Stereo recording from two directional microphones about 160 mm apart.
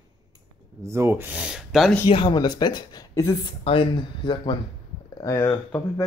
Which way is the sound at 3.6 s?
30° left (ahead or behind).